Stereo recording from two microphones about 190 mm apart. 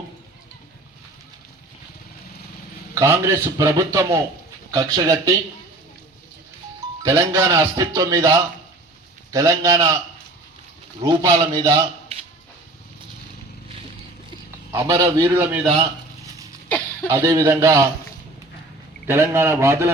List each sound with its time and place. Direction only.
2.9 s a man's voice: 15° right (ahead or behind)
7.0 s a man's voice: 20° right (ahead or behind)
11.0 s speech: 20° right (ahead or behind)
14.7 s a man's voice: 20° right (ahead or behind)
16.2 s a sound: 15° right (ahead or behind)
16.6 s a sound: 5° left (ahead or behind)
17.1 s a man's voice: 15° right (ahead or behind)
19.0 s a man's voice: 10° right (ahead or behind)